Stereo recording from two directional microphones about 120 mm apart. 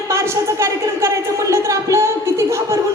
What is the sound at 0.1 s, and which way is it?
A man's voice, 25° right (ahead or behind).